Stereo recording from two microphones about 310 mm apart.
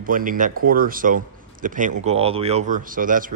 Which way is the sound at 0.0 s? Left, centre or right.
Right.